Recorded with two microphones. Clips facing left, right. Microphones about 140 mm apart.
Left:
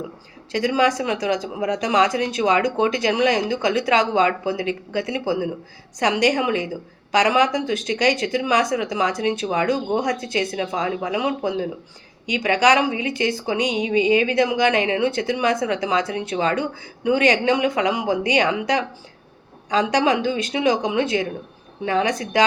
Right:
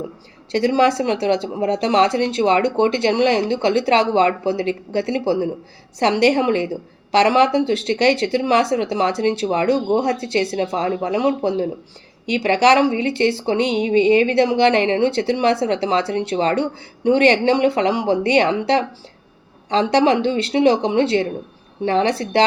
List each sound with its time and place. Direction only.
0.5 s a woman's voice: 35° right (ahead or behind)